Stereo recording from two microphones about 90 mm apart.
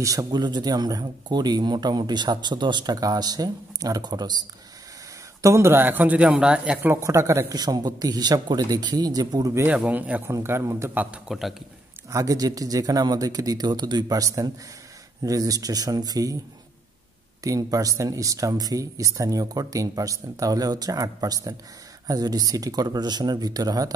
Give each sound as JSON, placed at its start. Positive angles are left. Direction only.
{"t": 0.0, "sound": "speech", "side_deg": -40}
{"t": 0.4, "sound": "speech", "side_deg": -50}
{"t": 5.4, "sound": "a man's voice", "side_deg": -30}
{"t": 7.0, "sound": "speech", "side_deg": -35}
{"t": 7.5, "sound": "speech", "side_deg": -50}
{"t": 9.8, "sound": "a man's voice", "side_deg": -20}
{"t": 10.3, "sound": "speech", "side_deg": -30}
{"t": 11.2, "sound": "a man's voice", "side_deg": 0}
{"t": 12.1, "sound": "speech", "side_deg": -40}
{"t": 17.4, "sound": "speech", "side_deg": -40}